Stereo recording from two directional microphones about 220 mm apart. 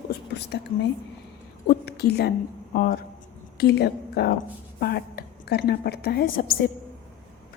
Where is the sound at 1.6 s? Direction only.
45° left (ahead or behind).